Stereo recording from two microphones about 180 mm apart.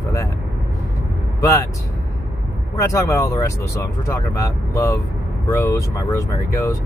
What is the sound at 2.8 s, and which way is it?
Speech, 15° left (ahead or behind).